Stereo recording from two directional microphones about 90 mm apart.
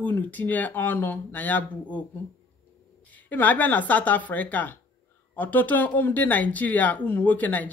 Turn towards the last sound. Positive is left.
turn(degrees=20)  # may be behind; listen again after turning